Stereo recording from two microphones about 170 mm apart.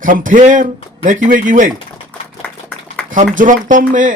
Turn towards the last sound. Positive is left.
turn(degrees=-50)  # may be behind; listen again after turning